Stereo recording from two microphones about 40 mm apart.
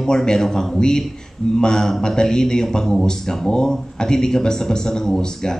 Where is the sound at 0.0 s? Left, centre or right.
Centre.